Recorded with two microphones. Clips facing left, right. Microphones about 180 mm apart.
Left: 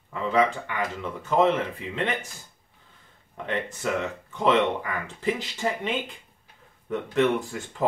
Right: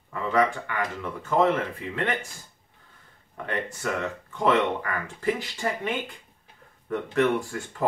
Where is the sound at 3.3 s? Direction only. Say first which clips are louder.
Left 1 dB; 20° left (ahead or behind).